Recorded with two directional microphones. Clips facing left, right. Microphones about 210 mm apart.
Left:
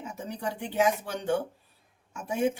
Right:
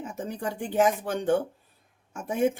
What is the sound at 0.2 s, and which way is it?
Speech, 50° right (ahead or behind).